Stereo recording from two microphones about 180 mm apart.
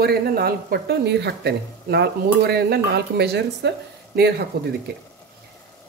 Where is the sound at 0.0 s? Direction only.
60° right (ahead or behind).